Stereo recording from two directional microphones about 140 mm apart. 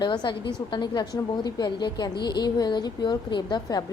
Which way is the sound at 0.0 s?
35° left (ahead or behind).